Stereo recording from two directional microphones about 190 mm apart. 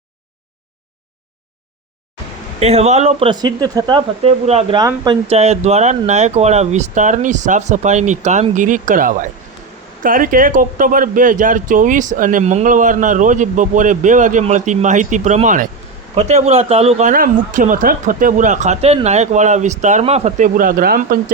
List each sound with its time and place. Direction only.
2.6 s speech: 35° right (ahead or behind)
4.8 s speech: 20° right (ahead or behind)
5.3 s speech: 35° right (ahead or behind)